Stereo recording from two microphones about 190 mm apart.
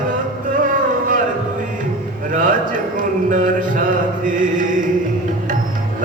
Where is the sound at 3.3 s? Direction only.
45° right (ahead or behind).